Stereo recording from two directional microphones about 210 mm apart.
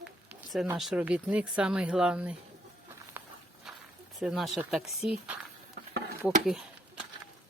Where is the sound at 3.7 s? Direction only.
Centre (ahead or behind).